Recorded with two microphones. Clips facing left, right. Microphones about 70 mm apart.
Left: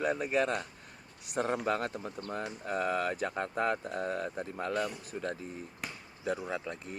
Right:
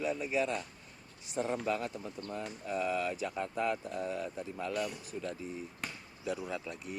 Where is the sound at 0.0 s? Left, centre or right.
Left.